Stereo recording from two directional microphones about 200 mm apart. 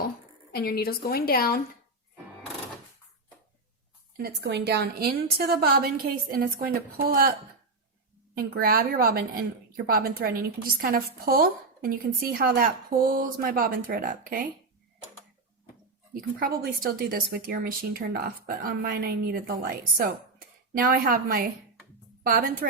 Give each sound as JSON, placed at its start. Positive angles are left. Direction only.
{"t": 0.5, "sound": "a woman's voice", "side_deg": 50}
{"t": 4.2, "sound": "a woman's voice", "side_deg": -55}
{"t": 8.4, "sound": "a woman's voice", "side_deg": -45}
{"t": 16.4, "sound": "a woman's voice", "side_deg": -45}